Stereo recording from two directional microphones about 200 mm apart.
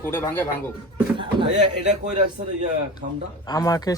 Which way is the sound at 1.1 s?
25° right (ahead or behind).